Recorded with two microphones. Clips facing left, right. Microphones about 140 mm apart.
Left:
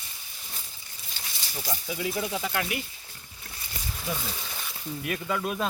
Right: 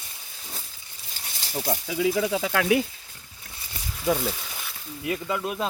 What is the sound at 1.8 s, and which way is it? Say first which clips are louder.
Speech: right 7 dB; 90° right.